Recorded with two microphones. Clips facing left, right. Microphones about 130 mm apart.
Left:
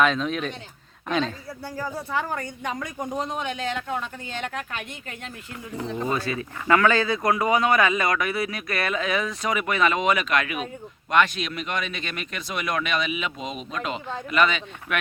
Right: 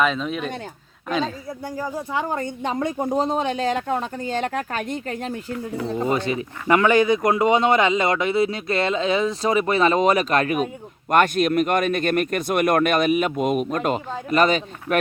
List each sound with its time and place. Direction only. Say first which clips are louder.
0.0 s speech: even; 5° right (ahead or behind)
1.5 s speech: right 3 dB; 15° right (ahead or behind); by 6.1 s 40° right (ahead or behind)
6.1 s speech: right 4 dB; 20° right (ahead or behind); by 14.9 s 40° right (ahead or behind)